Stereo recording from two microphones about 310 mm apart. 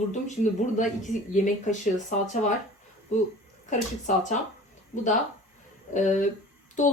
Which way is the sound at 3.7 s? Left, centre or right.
Left.